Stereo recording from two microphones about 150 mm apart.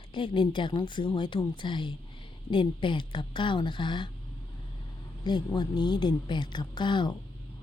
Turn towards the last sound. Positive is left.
turn(degrees=30)  # may be behind; listen again after turning